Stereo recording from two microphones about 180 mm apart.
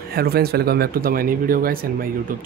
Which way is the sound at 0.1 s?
60° right (ahead or behind).